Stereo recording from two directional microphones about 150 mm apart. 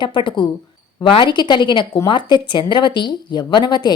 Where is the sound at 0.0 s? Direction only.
30° left (ahead or behind).